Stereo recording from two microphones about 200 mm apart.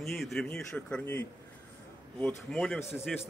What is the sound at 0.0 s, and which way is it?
A man's voice, centre (ahead or behind).